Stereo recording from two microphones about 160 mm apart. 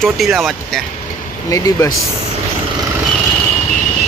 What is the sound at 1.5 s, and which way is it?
Speech, 20° left (ahead or behind).